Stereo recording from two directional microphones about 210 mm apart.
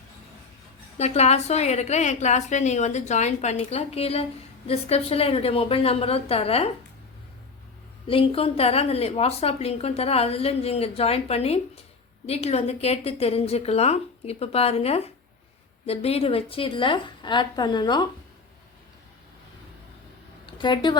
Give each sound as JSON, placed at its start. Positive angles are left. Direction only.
{"t": 0.9, "sound": "a woman's voice", "side_deg": 30}
{"t": 8.0, "sound": "a woman's voice", "side_deg": 25}
{"t": 20.5, "sound": "a woman's voice", "side_deg": 20}